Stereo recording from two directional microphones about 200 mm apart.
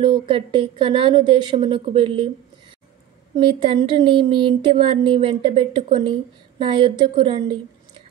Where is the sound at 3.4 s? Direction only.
30° right (ahead or behind).